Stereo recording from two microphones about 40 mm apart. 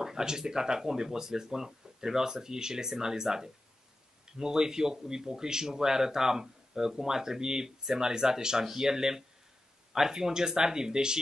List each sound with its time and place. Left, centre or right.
0.0 s speech: centre